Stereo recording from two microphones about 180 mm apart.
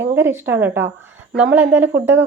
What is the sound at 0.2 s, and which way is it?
A woman's voice, 10° right (ahead or behind).